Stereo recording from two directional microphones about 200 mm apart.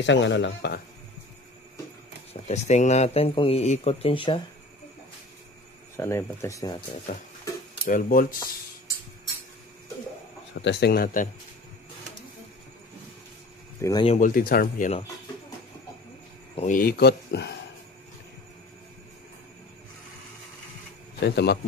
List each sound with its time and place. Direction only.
0.0 s speech: 65° left (ahead or behind)
2.4 s a man's voice: 35° left (ahead or behind)
5.9 s speech: 15° left (ahead or behind)
7.9 s speech: 45° left (ahead or behind)
10.5 s speech: 60° left (ahead or behind)
13.7 s speech: 15° left (ahead or behind)
14.0 s speech: 40° left (ahead or behind)
16.5 s speech: 40° left (ahead or behind)
21.2 s speech: 55° left (ahead or behind)